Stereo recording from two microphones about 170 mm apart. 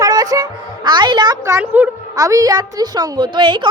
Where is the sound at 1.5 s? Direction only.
10° right (ahead or behind).